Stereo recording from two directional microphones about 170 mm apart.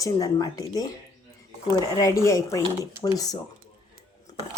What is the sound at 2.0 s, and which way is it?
A woman's voice, 20° left (ahead or behind).